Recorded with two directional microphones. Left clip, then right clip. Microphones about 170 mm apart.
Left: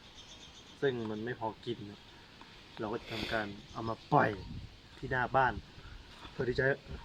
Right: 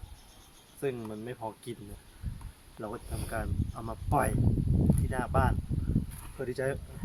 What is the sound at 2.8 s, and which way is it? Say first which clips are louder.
Speech: left 2 dB; 15° right (ahead or behind).